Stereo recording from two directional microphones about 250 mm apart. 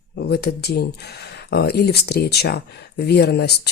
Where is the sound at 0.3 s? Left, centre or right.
Left.